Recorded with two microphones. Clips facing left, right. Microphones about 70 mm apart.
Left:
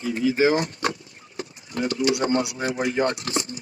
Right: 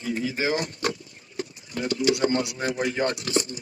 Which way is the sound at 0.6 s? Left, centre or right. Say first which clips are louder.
Left 2 dB; left.